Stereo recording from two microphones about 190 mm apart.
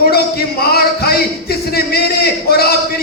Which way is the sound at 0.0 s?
55° left (ahead or behind).